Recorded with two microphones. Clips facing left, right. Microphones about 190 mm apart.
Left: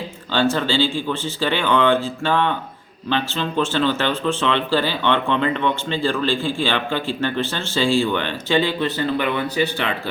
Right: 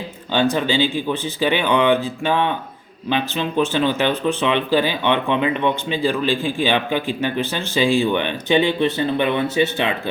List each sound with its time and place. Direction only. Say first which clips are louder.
0.3 s speech: right 1 dB; 15° right (ahead or behind)